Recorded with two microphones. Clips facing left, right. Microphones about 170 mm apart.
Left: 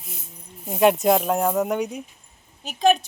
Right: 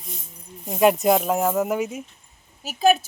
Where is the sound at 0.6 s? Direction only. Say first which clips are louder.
Even; centre (ahead or behind).